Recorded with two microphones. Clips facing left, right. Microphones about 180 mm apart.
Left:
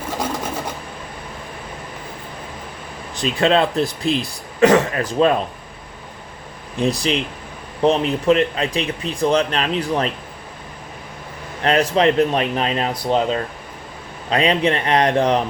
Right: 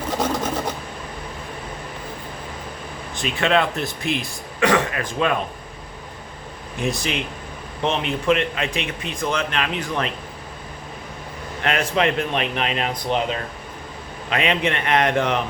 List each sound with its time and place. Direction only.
3.2 s speech: 35° left (ahead or behind)
6.7 s speech: 35° left (ahead or behind)
11.6 s speech: 35° left (ahead or behind)